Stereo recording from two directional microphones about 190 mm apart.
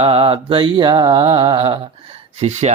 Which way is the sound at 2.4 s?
35° right (ahead or behind).